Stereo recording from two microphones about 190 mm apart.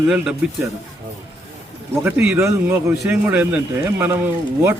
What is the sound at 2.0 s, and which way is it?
A man's voice, 10° right (ahead or behind).